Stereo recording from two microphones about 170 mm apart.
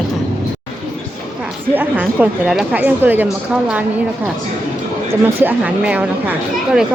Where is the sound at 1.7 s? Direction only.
10° right (ahead or behind).